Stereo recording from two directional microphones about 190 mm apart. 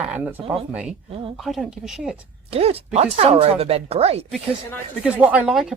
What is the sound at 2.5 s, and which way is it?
Speech, 30° right (ahead or behind).